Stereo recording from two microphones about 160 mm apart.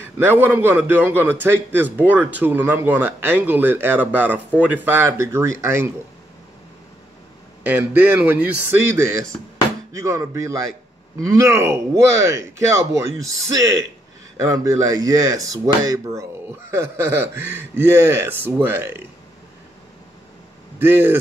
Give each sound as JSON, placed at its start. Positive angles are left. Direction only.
{"t": 0.3, "sound": "a man's voice", "side_deg": -10}
{"t": 7.6, "sound": "a man's voice", "side_deg": -10}
{"t": 20.8, "sound": "a man's voice", "side_deg": -15}